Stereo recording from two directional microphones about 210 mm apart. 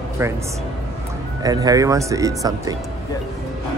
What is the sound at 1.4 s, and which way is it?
Speech, 15° right (ahead or behind).